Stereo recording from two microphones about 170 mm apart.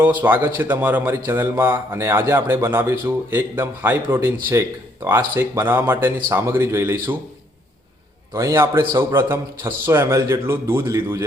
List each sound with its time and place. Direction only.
0.0 s speech: 10° right (ahead or behind)
5.4 s speech: 10° right (ahead or behind)
8.3 s speech: 15° right (ahead or behind)